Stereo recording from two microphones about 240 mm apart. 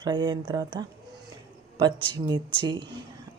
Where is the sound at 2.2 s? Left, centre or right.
Centre.